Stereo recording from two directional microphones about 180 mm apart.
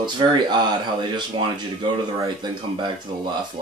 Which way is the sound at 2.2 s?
25° right (ahead or behind).